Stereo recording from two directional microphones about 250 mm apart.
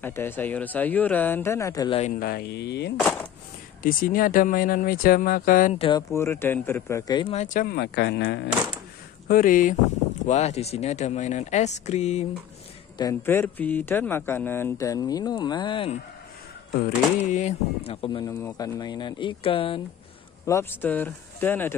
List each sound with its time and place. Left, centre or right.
0.0 s speech: centre; by 2.9 s left
3.0 s speech: centre
3.8 s speech: left
12.9 s speech: centre
17.3 s speech: left
20.4 s speech: centre